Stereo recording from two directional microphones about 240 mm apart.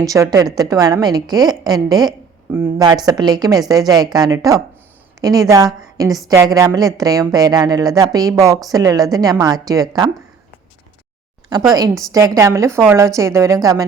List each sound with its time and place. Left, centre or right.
0.0 s a woman's voice: centre
11.7 s a woman's voice: centre